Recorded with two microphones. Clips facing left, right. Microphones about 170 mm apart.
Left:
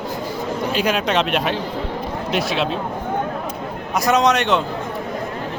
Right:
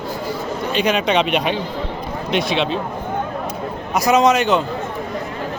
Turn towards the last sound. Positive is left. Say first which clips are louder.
# right 2 dB
turn(degrees=0)  # may be behind; listen again after turning